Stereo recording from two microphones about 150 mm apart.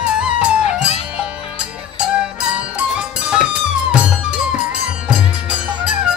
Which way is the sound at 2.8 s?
5° right (ahead or behind).